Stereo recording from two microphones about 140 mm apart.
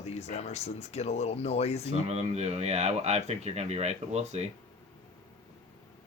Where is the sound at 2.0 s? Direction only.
50° right (ahead or behind).